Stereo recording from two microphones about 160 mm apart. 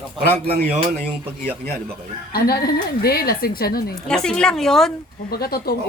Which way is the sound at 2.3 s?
70° left (ahead or behind).